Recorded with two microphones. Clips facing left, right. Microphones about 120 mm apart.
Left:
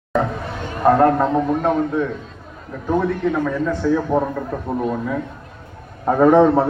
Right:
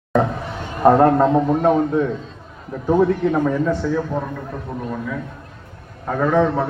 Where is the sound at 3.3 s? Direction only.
20° right (ahead or behind).